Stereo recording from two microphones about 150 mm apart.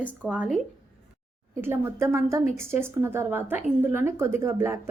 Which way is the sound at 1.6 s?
15° right (ahead or behind).